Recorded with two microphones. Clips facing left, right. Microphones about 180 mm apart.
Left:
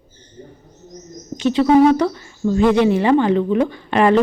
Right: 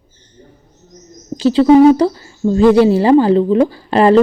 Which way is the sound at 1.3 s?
30° right (ahead or behind).